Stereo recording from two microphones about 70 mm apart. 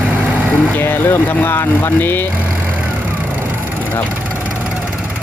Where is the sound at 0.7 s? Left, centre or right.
Left.